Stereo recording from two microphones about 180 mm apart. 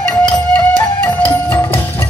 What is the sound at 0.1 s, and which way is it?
Music, 5° left (ahead or behind).